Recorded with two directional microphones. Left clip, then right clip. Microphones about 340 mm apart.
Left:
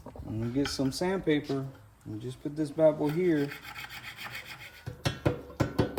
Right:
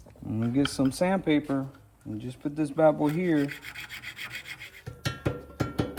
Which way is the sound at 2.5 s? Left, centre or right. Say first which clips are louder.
Right 2 dB; centre.